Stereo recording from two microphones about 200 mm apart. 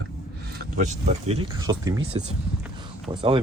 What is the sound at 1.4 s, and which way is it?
Speech, 20° right (ahead or behind).